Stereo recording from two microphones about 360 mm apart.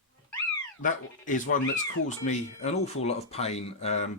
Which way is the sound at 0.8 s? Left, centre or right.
Left.